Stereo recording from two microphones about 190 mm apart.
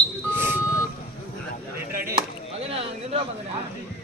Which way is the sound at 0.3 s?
10° right (ahead or behind).